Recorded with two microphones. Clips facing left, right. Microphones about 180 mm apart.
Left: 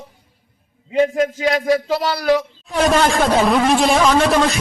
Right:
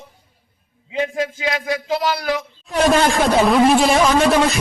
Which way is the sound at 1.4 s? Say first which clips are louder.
Left 6 dB; 35° left (ahead or behind).